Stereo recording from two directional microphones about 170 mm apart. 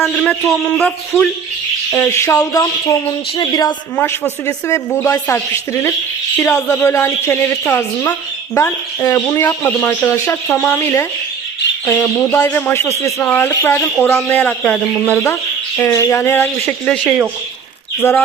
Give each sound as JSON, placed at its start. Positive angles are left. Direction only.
{"t": 0.3, "sound": "speech", "side_deg": 5}
{"t": 1.9, "sound": "speech", "side_deg": 15}
{"t": 3.9, "sound": "speech", "side_deg": 10}
{"t": 18.0, "sound": "speech", "side_deg": 15}